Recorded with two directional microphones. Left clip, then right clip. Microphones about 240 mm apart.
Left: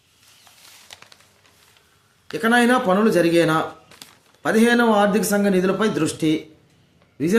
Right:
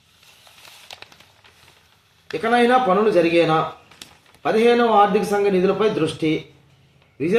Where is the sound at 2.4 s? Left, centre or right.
Left.